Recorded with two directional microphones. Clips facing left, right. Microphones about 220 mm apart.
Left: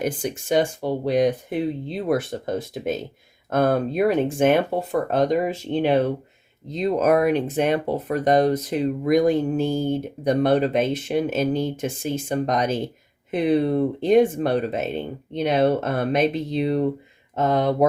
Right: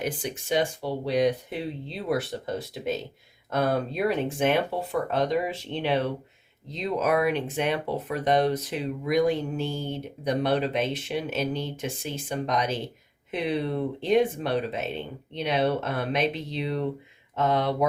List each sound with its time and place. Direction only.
0.0 s speech: 45° left (ahead or behind)